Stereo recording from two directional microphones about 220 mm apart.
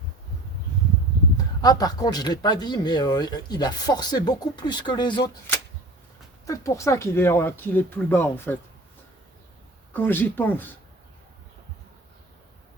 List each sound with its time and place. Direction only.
1.6 s speech: 15° left (ahead or behind)
9.9 s speech: 10° left (ahead or behind)